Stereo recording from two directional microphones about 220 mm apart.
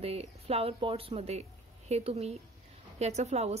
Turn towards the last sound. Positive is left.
turn(degrees=-30)  # may be behind; listen again after turning